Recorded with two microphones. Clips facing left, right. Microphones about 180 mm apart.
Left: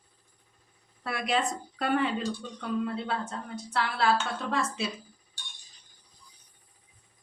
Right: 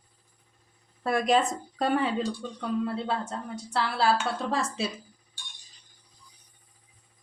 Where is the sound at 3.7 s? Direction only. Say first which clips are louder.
Right 2 dB; 30° right (ahead or behind).